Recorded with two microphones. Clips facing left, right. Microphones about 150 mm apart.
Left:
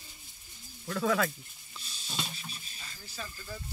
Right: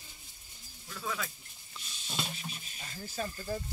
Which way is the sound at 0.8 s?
75° left (ahead or behind).